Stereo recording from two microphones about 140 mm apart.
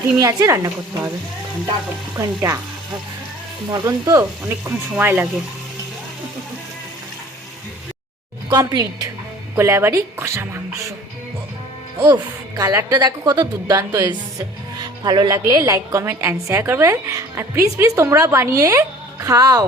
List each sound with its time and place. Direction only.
0.2 s a woman's voice: 25° right (ahead or behind)
2.1 s a woman's voice: 25° right (ahead or behind)
3.7 s a woman's voice: 25° right (ahead or behind)
8.4 s a woman's voice: 25° right (ahead or behind)
11.9 s a woman's voice: 30° right (ahead or behind)